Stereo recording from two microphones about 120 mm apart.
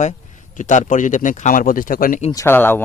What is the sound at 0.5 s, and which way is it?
Speech, 90° left.